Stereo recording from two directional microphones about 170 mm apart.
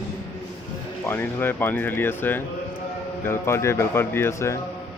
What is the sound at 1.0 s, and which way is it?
A man's voice, 15° left (ahead or behind).